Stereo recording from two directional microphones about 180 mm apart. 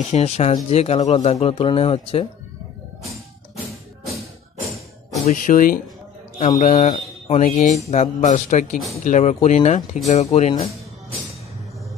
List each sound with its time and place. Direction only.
0.1 s speech: 35° left (ahead or behind)
5.3 s speech: 50° left (ahead or behind)